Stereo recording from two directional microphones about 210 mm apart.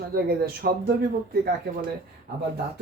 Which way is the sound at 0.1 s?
45° right (ahead or behind).